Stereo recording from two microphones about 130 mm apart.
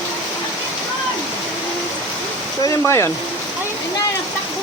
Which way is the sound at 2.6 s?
20° left (ahead or behind).